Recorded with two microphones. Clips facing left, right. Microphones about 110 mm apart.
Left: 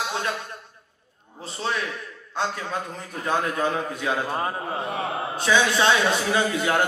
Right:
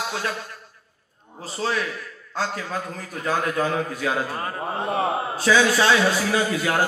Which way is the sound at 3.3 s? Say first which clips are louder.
Right 1 dB; 25° left (ahead or behind).